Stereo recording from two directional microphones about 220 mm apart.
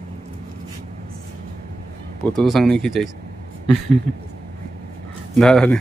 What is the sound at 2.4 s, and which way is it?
Speech, centre (ahead or behind).